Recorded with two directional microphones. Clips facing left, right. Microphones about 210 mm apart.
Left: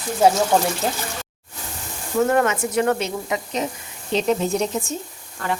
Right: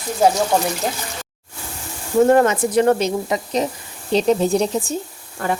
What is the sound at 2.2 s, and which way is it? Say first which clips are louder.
Speech: right 5 dB; 35° right (ahead or behind).